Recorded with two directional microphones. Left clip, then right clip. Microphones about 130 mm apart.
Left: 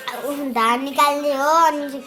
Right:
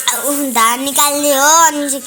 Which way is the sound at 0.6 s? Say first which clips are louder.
Right 3 dB; 35° right (ahead or behind).